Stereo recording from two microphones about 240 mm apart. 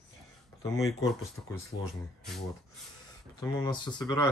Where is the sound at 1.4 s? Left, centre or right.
Centre.